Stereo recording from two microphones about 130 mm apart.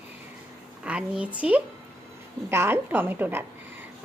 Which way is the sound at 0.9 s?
10° right (ahead or behind).